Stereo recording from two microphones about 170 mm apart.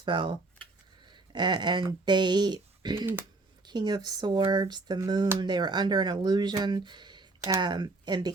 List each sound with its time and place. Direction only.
0.0 s speech: 25° right (ahead or behind)